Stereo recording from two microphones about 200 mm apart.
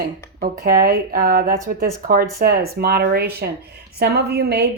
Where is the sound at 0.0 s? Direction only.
50° right (ahead or behind).